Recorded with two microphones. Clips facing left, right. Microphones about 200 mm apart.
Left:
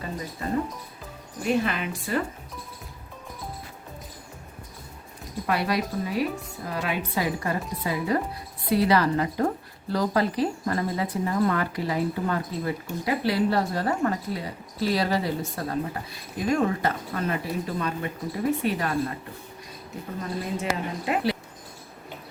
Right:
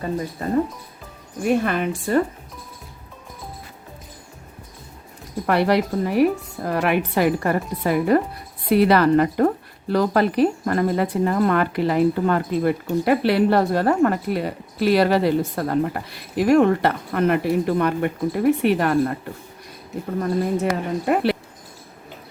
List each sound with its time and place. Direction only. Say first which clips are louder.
1.4 s speech: right 5 dB; 50° right (ahead or behind)
5.5 s speech: right 7 dB; 65° right (ahead or behind)
20.1 s speech: right 9 dB; 55° right (ahead or behind)